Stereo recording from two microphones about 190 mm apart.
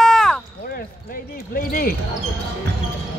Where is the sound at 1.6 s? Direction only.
50° left (ahead or behind).